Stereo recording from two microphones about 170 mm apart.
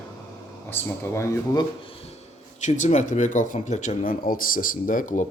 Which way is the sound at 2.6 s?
45° left (ahead or behind).